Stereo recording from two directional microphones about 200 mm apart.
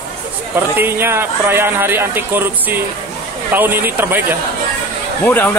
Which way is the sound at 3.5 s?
10° right (ahead or behind).